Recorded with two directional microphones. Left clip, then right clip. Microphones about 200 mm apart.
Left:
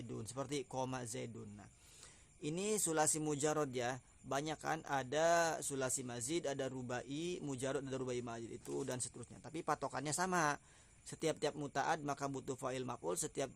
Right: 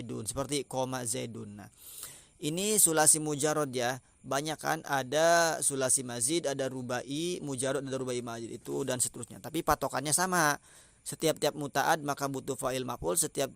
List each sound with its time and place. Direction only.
0.1 s a man's voice: 30° right (ahead or behind)